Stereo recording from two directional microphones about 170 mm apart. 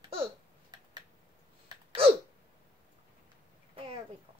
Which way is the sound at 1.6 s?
30° right (ahead or behind).